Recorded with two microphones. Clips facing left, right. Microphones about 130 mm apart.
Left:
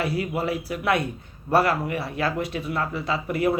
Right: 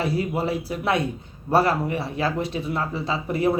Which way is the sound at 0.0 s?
35° right (ahead or behind).